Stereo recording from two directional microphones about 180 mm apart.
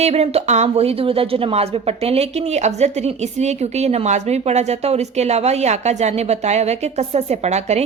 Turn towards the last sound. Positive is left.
turn(degrees=-40)  # may be behind; listen again after turning